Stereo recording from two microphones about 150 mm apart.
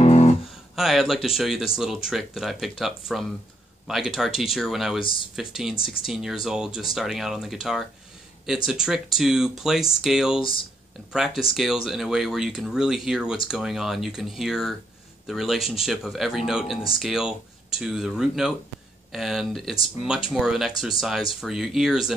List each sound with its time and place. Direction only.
0.0 s music: 45° left (ahead or behind)
0.7 s speech: centre (ahead or behind)